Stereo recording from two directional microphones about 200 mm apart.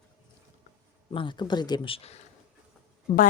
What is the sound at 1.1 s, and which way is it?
Speech, 25° left (ahead or behind).